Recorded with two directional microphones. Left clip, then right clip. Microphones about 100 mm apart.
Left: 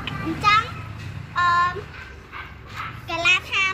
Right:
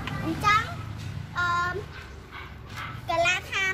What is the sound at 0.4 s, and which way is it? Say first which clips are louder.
Children playing: left 5 dB; 35° right (ahead or behind).